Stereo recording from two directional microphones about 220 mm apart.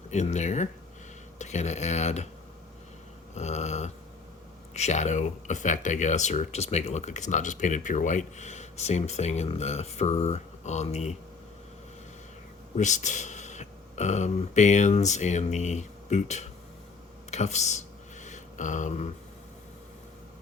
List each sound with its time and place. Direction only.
0.1 s speech: 30° left (ahead or behind)
3.3 s speech: 30° left (ahead or behind)
12.7 s speech: 35° left (ahead or behind)
17.3 s a sound: 30° left (ahead or behind)